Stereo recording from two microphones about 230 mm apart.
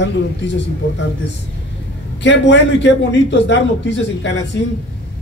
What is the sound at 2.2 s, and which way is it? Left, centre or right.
A man's voice, left.